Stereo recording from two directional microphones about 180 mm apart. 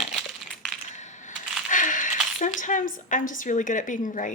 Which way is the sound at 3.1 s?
45° left (ahead or behind).